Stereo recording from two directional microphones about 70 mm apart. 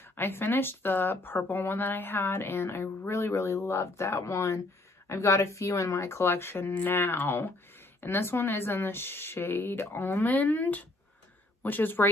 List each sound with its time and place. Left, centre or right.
0.1 s speech: left